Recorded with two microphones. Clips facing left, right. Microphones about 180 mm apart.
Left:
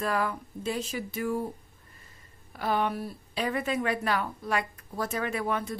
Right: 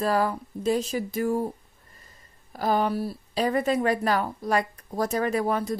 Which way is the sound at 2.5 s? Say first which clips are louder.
Right 4 dB; 40° right (ahead or behind).